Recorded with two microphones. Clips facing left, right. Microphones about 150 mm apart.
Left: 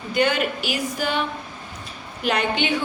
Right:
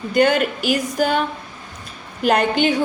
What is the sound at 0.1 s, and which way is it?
A woman's voice, 45° right (ahead or behind).